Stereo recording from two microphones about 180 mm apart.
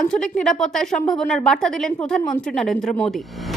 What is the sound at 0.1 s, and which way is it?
A woman's voice, 5° left (ahead or behind).